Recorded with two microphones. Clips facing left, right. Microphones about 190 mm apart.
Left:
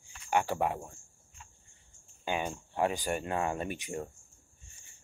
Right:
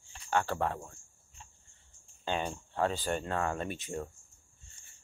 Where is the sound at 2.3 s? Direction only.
10° left (ahead or behind).